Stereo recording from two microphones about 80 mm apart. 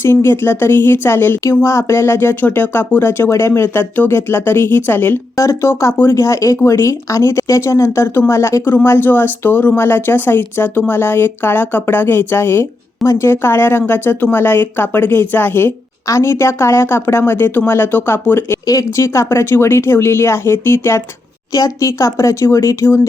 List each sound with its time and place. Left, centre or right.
0.0 s speech: left
5.4 s speech: left
18.6 s speech: left
21.5 s speech: left